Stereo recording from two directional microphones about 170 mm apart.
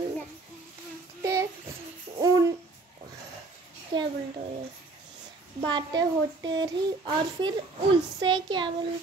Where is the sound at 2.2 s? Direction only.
20° right (ahead or behind).